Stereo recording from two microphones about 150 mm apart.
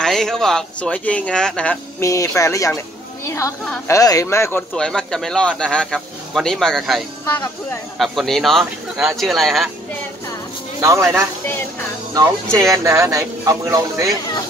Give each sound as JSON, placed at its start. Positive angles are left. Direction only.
{"t": 0.0, "sound": "speech", "side_deg": 5}
{"t": 2.0, "sound": "speech", "side_deg": 20}
{"t": 4.7, "sound": "speech", "side_deg": 5}
{"t": 8.0, "sound": "speech", "side_deg": 0}
{"t": 10.8, "sound": "speech", "side_deg": -20}
{"t": 12.7, "sound": "speech", "side_deg": -20}